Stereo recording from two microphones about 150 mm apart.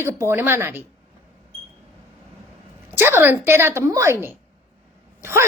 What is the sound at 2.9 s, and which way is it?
A woman's voice, 15° right (ahead or behind).